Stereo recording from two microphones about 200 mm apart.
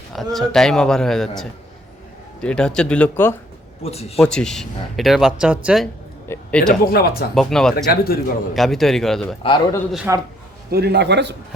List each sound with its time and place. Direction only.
0.1 s speech: centre (ahead or behind)
2.4 s speech: 5° left (ahead or behind)
3.8 s speech: 30° left (ahead or behind)
4.2 s speech: 5° left (ahead or behind)
6.2 s speech: 10° left (ahead or behind)
6.9 s speech: 50° left (ahead or behind)
7.3 s speech: centre (ahead or behind)
7.9 s speech: 50° left (ahead or behind)
8.5 s speech: centre (ahead or behind)
9.4 s a man's voice: 25° left (ahead or behind)
10.1 s a man's voice: 10° right (ahead or behind)
10.7 s a man's voice: 55° right (ahead or behind)